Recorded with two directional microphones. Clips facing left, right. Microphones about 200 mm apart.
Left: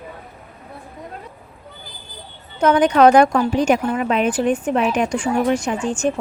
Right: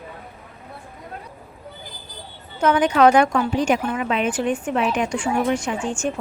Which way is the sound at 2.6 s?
40° left (ahead or behind).